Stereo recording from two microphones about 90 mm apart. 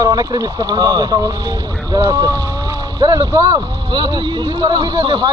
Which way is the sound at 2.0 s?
25° right (ahead or behind).